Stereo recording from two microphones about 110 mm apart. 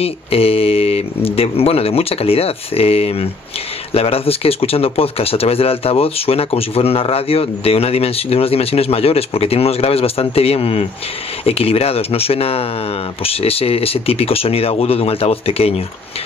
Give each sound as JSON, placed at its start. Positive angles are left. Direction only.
{"t": 0.0, "sound": "speech", "side_deg": 65}